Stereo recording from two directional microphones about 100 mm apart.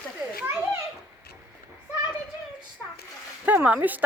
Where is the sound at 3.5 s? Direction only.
15° right (ahead or behind).